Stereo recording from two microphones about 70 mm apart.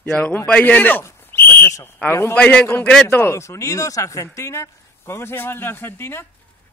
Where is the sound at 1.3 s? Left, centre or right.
Left.